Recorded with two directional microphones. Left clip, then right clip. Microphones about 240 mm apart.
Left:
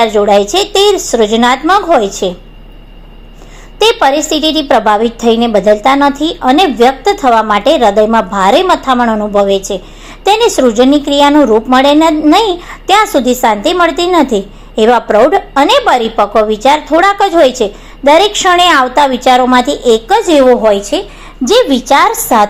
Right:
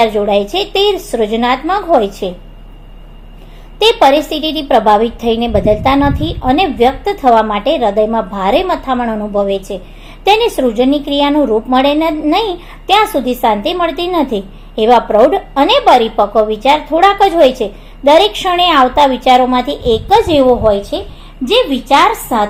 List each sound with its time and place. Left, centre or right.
0.0 s a woman's voice: left
3.8 s a woman's voice: centre